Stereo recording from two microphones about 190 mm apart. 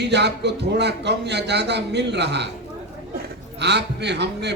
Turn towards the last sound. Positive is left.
turn(degrees=-65)  # may be behind; listen again after turning